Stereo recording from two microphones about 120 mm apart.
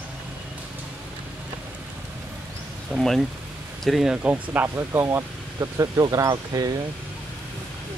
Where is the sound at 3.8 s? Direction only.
Centre (ahead or behind); by 6.7 s 30° right (ahead or behind).